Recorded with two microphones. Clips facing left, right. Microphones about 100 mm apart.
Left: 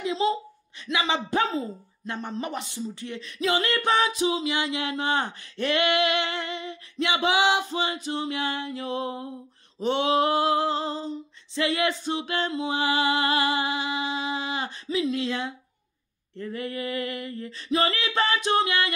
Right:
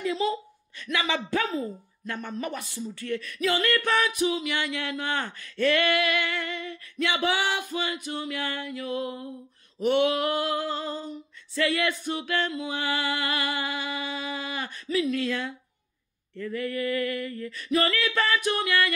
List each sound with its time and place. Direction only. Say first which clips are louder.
0.1 s speech: left 2 dB; 25° left (ahead or behind)